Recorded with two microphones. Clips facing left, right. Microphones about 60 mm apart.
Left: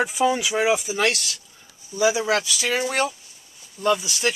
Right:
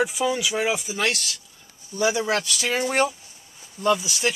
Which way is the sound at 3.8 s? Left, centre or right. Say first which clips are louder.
Even; centre.